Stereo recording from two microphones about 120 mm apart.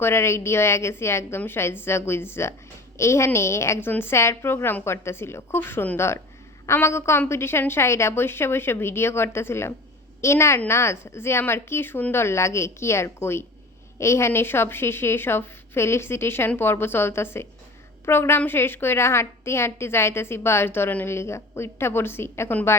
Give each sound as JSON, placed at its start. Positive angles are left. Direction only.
{"t": 0.0, "sound": "a woman's voice", "side_deg": 20}